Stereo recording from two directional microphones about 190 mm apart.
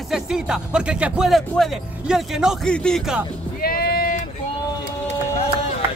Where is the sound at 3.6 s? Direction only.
55° left (ahead or behind).